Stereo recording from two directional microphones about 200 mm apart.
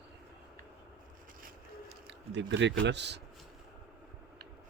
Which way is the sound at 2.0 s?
60° right (ahead or behind).